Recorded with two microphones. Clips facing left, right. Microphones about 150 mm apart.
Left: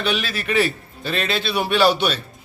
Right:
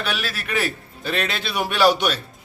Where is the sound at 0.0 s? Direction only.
5° right (ahead or behind).